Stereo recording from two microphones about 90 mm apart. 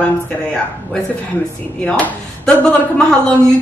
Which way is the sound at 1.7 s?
10° left (ahead or behind).